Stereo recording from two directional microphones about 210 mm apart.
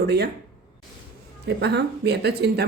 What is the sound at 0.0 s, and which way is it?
Speech, 50° right (ahead or behind).